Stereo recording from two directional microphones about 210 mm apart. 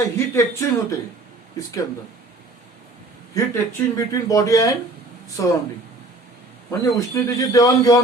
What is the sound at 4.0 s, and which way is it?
Speech, 15° left (ahead or behind).